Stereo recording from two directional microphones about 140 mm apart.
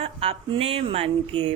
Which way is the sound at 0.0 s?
45° right (ahead or behind).